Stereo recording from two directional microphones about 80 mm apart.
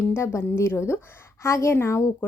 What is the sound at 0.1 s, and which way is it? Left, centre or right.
Speech, left.